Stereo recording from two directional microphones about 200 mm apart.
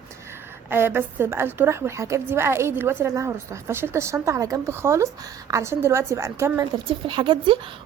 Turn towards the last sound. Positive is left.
turn(degrees=-25)  # may be behind; listen again after turning